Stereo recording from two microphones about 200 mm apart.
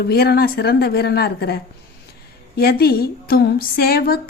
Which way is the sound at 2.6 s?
50° left (ahead or behind).